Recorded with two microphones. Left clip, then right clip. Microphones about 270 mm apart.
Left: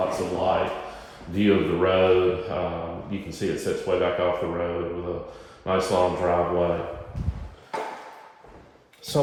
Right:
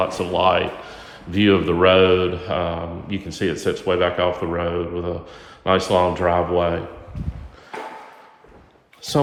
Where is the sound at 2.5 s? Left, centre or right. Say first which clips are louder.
Right 5 dB; right.